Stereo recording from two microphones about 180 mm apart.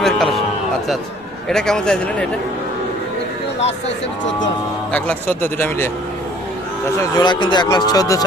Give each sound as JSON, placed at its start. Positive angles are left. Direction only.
{"t": 0.0, "sound": "a sound", "side_deg": 0}
{"t": 1.5, "sound": "speech", "side_deg": 5}
{"t": 4.9, "sound": "speech", "side_deg": 5}
{"t": 7.2, "sound": "speech", "side_deg": 25}